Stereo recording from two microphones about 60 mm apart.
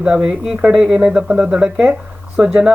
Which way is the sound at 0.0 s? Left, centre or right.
Centre.